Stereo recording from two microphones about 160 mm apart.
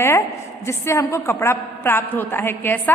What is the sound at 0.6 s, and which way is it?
A woman's voice, 15° left (ahead or behind).